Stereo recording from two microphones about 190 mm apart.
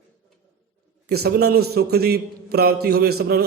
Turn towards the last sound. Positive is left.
turn(degrees=-55)  # may be behind; listen again after turning